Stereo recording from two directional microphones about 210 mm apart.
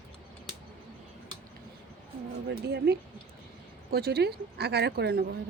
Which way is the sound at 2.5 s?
50° right (ahead or behind).